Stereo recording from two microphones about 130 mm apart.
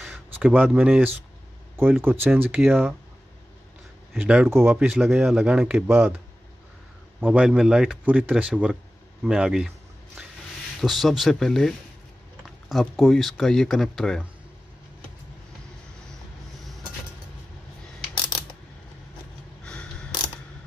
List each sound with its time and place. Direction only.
0.3 s speech: 15° right (ahead or behind)
4.2 s speech: 10° right (ahead or behind)
5.9 s speech: 15° right (ahead or behind)
7.2 s speech: 10° right (ahead or behind)
10.8 s speech: centre (ahead or behind)
19.6 s a sound: 10° left (ahead or behind)